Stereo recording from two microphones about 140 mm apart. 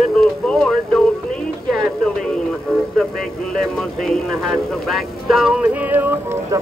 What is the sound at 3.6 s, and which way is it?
Speech, 5° left (ahead or behind).